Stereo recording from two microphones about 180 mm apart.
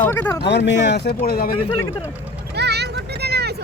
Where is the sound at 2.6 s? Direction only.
65° right (ahead or behind).